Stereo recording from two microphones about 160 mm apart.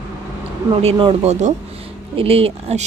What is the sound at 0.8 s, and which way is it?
Speech, 35° right (ahead or behind).